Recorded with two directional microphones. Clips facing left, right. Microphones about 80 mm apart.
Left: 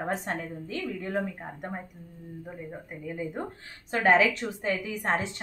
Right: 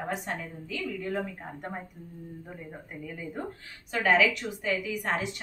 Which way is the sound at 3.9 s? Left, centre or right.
Left.